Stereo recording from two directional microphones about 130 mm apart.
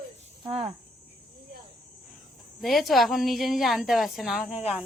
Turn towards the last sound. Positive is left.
turn(degrees=-10)  # may be behind; listen again after turning